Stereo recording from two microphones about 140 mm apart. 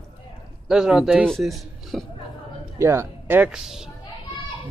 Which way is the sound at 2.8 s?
20° right (ahead or behind).